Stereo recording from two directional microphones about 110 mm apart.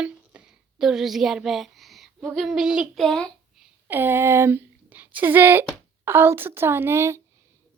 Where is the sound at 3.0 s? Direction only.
10° left (ahead or behind).